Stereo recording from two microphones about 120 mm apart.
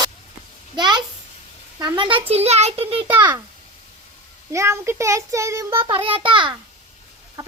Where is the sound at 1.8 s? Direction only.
45° right (ahead or behind).